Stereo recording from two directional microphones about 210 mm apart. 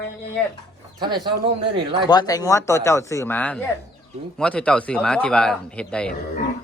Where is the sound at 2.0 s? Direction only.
20° left (ahead or behind).